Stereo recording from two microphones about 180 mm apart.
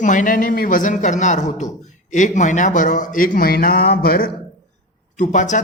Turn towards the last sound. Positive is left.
turn(degrees=45)  # may be behind; listen again after turning